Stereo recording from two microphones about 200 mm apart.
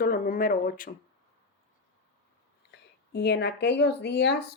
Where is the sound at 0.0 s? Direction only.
45° left (ahead or behind).